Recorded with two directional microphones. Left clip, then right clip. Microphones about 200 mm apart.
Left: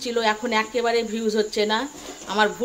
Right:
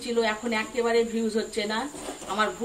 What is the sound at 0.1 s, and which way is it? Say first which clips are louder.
Speech: left 4 dB; 55° left (ahead or behind).